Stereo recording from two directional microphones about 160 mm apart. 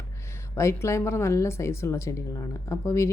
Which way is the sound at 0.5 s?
15° left (ahead or behind).